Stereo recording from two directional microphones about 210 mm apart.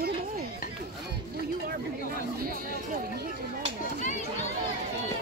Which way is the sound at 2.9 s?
40° right (ahead or behind).